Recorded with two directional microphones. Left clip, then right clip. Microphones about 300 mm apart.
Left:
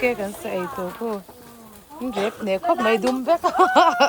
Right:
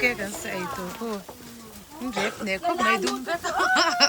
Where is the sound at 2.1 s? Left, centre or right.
Centre.